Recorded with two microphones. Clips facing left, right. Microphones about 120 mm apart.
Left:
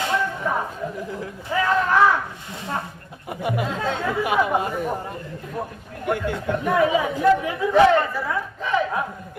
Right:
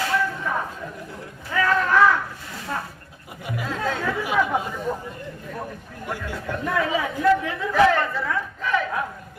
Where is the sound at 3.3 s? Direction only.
60° left (ahead or behind).